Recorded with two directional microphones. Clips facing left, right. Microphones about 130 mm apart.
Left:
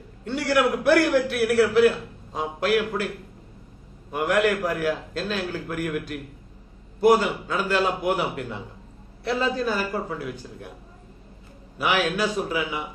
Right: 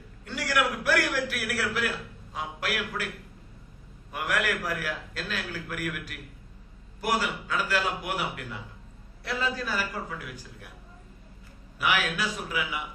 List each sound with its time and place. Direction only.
0.3 s a man's voice: 25° left (ahead or behind)
4.1 s a man's voice: 25° left (ahead or behind)
11.8 s a man's voice: 30° left (ahead or behind)